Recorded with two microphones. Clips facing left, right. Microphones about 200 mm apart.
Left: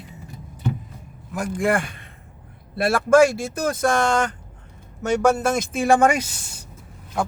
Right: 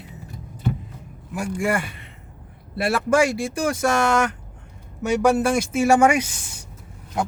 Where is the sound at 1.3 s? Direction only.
10° right (ahead or behind).